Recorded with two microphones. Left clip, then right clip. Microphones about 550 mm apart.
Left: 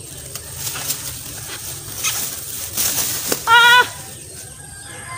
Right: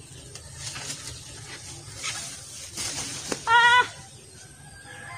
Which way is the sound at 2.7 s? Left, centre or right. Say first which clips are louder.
Left 10 dB; right.